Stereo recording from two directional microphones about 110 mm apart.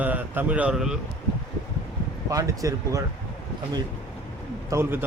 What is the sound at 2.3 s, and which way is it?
Speech, 30° right (ahead or behind).